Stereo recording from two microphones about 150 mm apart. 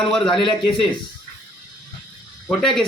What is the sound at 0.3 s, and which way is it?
Speech, 35° left (ahead or behind).